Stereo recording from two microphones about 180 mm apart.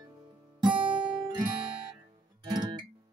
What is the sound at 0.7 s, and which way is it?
Music, 25° right (ahead or behind).